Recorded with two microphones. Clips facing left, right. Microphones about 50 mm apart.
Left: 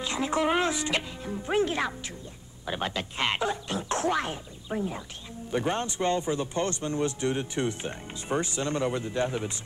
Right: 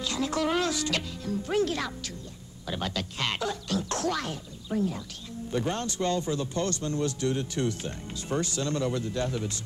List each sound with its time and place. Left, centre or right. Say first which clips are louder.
0.0 s a man's voice: left 2 dB; left